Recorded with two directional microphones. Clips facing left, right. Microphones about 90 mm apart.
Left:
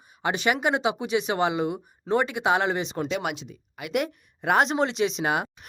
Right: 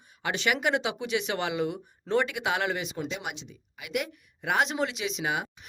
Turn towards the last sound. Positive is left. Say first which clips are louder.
# left 5 dB
turn(degrees=55)  # may be behind; listen again after turning